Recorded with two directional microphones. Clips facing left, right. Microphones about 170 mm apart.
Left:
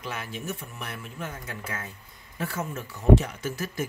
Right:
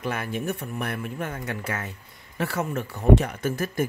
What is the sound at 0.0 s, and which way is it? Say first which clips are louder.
Speech: right 7 dB; 55° right (ahead or behind).